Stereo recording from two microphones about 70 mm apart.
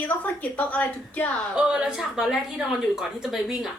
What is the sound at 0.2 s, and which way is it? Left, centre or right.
A woman's voice, left.